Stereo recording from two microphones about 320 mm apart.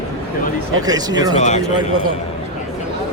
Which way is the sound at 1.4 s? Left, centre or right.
Left.